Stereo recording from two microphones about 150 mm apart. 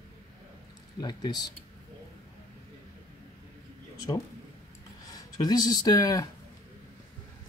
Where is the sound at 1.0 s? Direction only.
25° left (ahead or behind).